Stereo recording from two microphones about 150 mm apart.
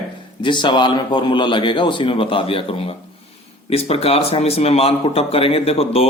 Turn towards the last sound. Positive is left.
turn(degrees=40)  # may be behind; listen again after turning